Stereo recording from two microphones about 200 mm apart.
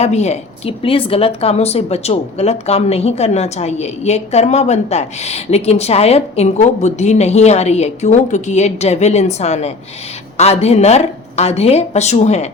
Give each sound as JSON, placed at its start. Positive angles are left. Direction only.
{"t": 0.0, "sound": "a woman's voice", "side_deg": 35}